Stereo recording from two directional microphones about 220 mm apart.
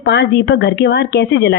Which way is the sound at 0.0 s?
50° left (ahead or behind).